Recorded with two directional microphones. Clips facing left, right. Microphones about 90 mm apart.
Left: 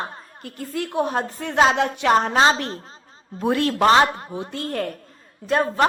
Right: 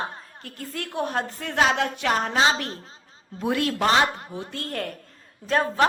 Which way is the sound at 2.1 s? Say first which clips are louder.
Left 5 dB; 30° left (ahead or behind).